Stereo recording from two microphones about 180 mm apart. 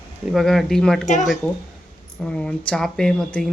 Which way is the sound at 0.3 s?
Centre (ahead or behind).